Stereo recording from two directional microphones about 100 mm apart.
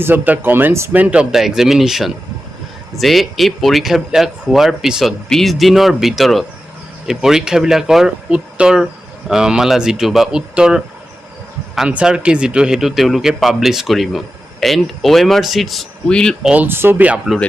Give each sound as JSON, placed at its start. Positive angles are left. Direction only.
{"t": 0.0, "sound": "speech", "side_deg": -20}
{"t": 0.9, "sound": "speech", "side_deg": -15}
{"t": 16.4, "sound": "speech", "side_deg": -10}
{"t": 16.6, "sound": "speech", "side_deg": -20}